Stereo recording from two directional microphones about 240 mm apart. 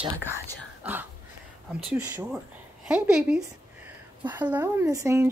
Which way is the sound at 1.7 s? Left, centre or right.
Centre.